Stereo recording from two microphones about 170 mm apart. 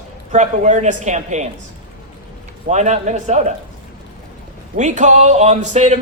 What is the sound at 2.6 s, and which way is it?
Speech, 45° right (ahead or behind).